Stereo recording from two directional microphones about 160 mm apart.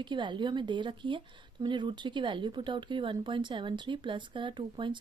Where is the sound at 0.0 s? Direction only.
30° right (ahead or behind).